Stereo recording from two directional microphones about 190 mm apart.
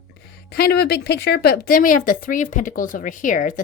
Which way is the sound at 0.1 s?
55° left (ahead or behind).